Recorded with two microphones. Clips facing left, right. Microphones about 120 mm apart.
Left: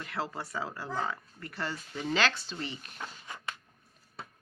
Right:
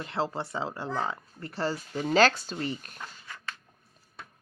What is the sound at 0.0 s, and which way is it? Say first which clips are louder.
Speech: right 5 dB; 25° right (ahead or behind).